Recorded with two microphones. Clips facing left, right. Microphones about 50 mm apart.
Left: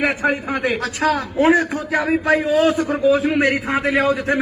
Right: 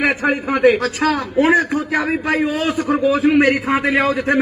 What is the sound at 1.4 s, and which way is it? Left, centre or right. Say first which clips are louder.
A man's voice: right 2 dB; right.